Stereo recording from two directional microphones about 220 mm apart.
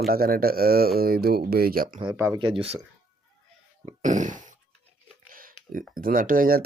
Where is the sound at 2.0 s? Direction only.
15° right (ahead or behind).